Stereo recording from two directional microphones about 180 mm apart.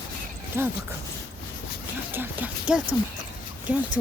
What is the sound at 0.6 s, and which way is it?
Speech, 15° right (ahead or behind).